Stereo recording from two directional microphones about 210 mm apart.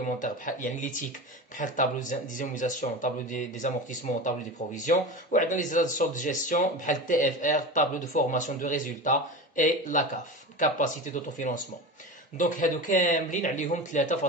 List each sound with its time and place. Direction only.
0.0 s speech: 40° left (ahead or behind)